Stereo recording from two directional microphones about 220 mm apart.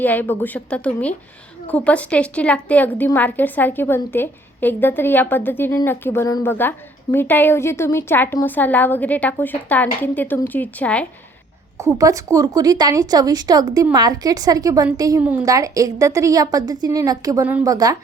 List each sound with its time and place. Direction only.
0.0 s a woman's voice: 10° left (ahead or behind)
11.9 s a woman's voice: 15° right (ahead or behind)